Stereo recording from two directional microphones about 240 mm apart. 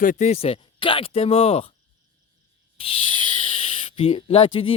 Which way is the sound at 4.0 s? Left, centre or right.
Left.